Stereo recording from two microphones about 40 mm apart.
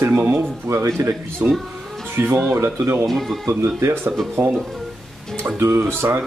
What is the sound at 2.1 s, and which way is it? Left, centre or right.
Speech, right.